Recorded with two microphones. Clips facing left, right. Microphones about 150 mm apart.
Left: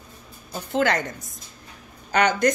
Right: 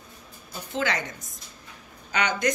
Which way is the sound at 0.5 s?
50° left (ahead or behind).